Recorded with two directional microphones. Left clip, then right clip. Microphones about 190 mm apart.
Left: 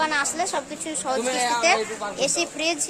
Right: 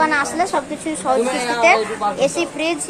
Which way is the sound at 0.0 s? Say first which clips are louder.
Right 6 dB; centre (ahead or behind).